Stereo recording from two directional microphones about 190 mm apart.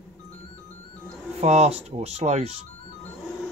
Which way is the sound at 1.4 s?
35° right (ahead or behind).